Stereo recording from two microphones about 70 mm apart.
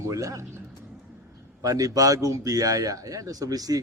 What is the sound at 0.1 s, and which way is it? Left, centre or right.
Speech, right.